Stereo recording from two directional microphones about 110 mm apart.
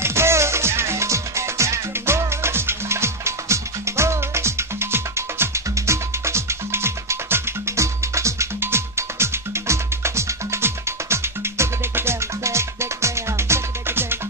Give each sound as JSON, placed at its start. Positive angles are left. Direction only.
{"t": 0.0, "sound": "music", "side_deg": -25}